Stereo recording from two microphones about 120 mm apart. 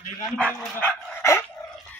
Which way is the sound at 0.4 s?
10° left (ahead or behind).